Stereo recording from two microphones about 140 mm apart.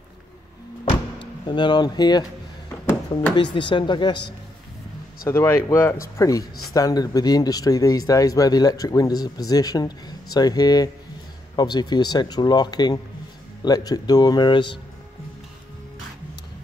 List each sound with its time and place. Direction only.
0.8 s a sound: 35° left (ahead or behind)
3.5 s speech: 35° left (ahead or behind)
5.3 s speech: 20° left (ahead or behind); by 14.8 s 35° left (ahead or behind)